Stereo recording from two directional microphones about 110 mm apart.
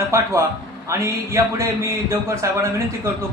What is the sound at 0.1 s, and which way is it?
A man's voice, 25° right (ahead or behind).